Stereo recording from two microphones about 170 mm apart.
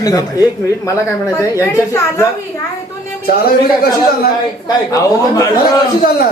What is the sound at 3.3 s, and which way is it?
Speech, 60° left (ahead or behind).